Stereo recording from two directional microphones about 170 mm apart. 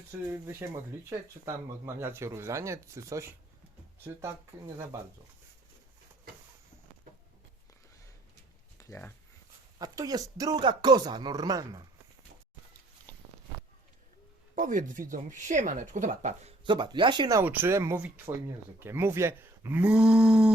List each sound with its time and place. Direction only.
0.3 s speech: 15° right (ahead or behind)
8.8 s speech: 15° left (ahead or behind)
9.7 s speech: 20° right (ahead or behind)
14.5 s speech: 50° right (ahead or behind)
16.6 s speech: 25° right (ahead or behind)
17.4 s speech: 10° right (ahead or behind)